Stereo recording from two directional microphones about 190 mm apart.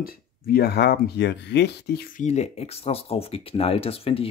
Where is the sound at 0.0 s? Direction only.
55° left (ahead or behind).